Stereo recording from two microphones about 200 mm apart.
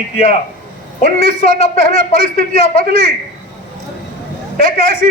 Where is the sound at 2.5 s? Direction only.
30° left (ahead or behind).